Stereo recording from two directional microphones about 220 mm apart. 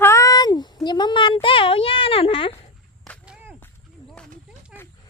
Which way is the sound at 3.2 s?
5° right (ahead or behind).